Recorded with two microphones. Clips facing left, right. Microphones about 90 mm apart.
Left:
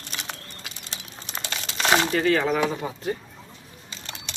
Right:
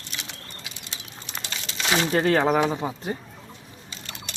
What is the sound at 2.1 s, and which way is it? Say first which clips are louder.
Speech: right 2 dB; 35° right (ahead or behind).